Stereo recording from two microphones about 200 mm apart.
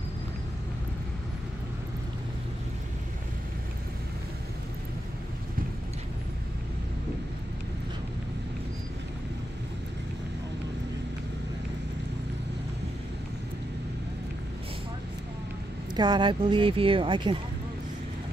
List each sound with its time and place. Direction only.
16.0 s speech: 20° right (ahead or behind)